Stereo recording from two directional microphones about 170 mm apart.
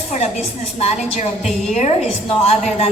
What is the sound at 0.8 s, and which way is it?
A woman's voice, 40° left (ahead or behind).